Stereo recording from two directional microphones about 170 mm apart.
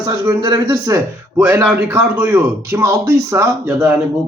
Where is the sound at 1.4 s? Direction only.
10° right (ahead or behind).